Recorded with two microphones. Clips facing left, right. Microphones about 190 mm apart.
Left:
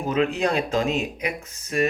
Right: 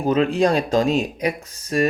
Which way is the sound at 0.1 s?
35° right (ahead or behind).